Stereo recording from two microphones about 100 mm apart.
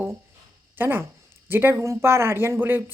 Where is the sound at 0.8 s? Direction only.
20° right (ahead or behind).